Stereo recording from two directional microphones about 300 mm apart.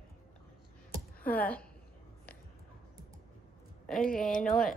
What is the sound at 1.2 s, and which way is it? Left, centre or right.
Speech, centre.